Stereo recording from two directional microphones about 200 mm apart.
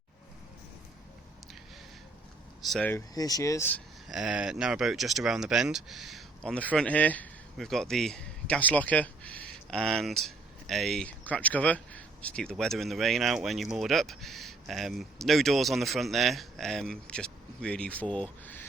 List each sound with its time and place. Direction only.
2.6 s speech: centre (ahead or behind)
2.9 s speech: 20° left (ahead or behind)
4.1 s speech: 5° right (ahead or behind)